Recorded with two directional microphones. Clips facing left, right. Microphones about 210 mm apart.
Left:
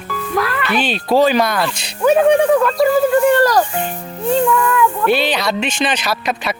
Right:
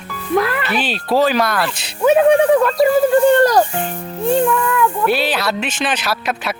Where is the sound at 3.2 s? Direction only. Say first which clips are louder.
Right 1 dB; 25° right (ahead or behind).